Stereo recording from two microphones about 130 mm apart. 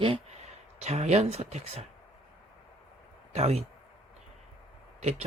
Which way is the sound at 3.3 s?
55° right (ahead or behind).